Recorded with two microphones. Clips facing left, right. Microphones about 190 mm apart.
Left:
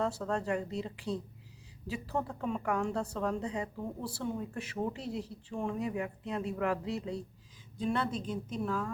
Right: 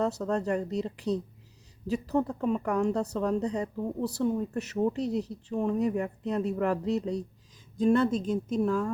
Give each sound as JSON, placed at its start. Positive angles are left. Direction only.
{"t": 0.3, "sound": "a woman's voice", "side_deg": -40}